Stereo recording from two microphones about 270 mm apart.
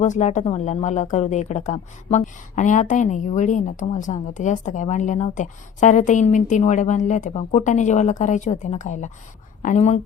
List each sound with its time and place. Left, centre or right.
0.0 s a woman's voice: left